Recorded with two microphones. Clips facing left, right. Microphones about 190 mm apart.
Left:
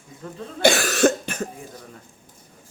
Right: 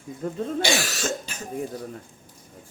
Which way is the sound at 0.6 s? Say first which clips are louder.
Left 13 dB; 55° left (ahead or behind).